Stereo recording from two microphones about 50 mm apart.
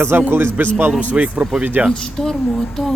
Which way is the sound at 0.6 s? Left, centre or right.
Right.